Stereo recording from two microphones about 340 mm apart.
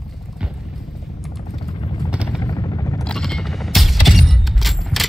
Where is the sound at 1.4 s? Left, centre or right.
Centre.